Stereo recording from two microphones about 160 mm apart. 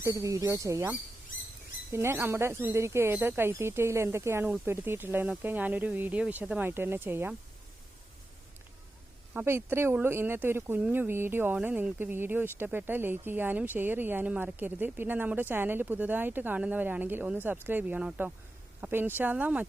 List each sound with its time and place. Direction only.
0.0 s speech: 20° right (ahead or behind)
1.9 s speech: 15° right (ahead or behind)
9.3 s speech: 15° right (ahead or behind)